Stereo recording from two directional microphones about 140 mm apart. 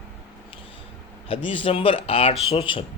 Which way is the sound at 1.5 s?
40° left (ahead or behind).